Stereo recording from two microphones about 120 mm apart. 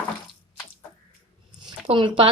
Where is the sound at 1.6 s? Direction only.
45° right (ahead or behind).